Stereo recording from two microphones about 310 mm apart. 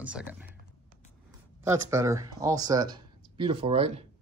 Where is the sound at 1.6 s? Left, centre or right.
Centre.